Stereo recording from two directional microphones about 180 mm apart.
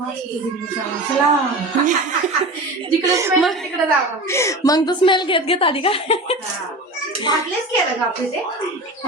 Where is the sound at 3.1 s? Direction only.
15° right (ahead or behind).